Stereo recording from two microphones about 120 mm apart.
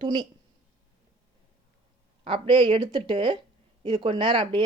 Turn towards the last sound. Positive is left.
turn(degrees=-45)  # may be behind; listen again after turning